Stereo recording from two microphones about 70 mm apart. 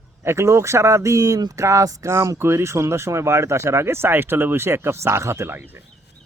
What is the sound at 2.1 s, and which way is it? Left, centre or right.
A man's voice, right.